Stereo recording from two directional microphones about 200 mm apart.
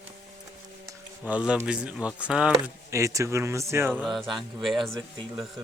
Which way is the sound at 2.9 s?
15° right (ahead or behind).